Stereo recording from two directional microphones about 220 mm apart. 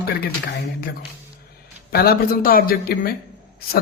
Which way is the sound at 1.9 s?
45° left (ahead or behind).